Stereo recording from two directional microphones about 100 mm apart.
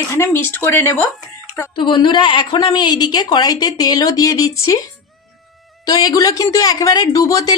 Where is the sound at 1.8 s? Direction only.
55° left (ahead or behind); by 4.8 s 35° left (ahead or behind).